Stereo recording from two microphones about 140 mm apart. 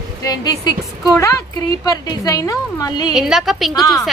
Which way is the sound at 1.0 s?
20° left (ahead or behind).